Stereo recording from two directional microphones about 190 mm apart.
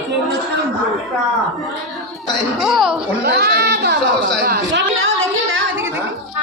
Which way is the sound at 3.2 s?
55° right (ahead or behind).